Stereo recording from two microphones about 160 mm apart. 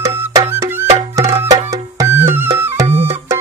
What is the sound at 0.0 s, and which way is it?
Music, 15° right (ahead or behind).